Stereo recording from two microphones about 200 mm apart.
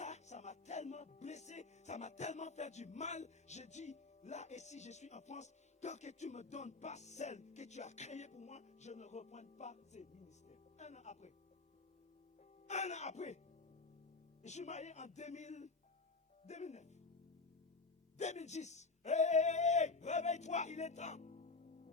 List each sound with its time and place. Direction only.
0.0 s music: 35° left (ahead or behind)
12.6 s speech: 35° left (ahead or behind)
14.4 s speech: 35° left (ahead or behind)
18.2 s speech: 35° left (ahead or behind)